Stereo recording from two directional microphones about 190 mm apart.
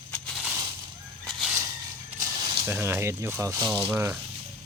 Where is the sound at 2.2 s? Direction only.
20° right (ahead or behind).